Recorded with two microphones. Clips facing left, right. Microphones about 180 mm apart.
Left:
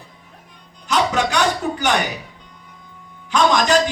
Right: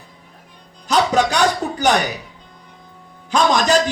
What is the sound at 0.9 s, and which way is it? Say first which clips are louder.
Music: right 3 dB; 35° right (ahead or behind).